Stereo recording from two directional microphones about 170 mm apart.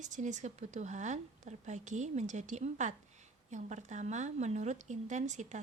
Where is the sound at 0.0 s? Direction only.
45° right (ahead or behind).